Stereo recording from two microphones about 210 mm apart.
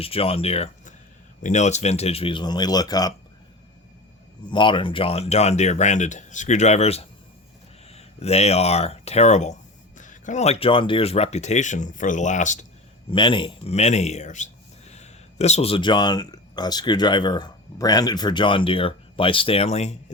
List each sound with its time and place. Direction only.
0.0 s speech: 25° left (ahead or behind)
4.5 s speech: 25° left (ahead or behind)
13.1 s speech: 25° left (ahead or behind)